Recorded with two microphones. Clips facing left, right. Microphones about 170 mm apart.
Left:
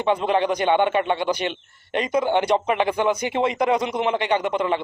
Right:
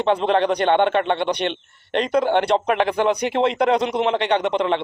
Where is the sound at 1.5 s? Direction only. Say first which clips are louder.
Right 3 dB; 10° left (ahead or behind).